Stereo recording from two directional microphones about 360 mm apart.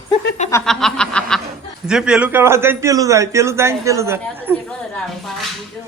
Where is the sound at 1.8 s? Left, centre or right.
Centre.